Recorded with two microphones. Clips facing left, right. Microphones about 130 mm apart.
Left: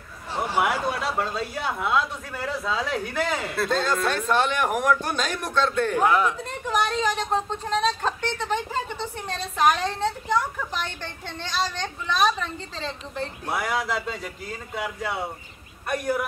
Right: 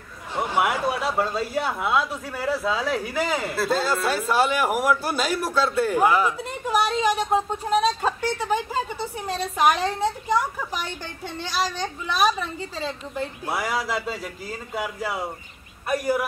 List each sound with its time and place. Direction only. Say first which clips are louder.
0.6 s a man's voice: right 1 dB; centre (ahead or behind)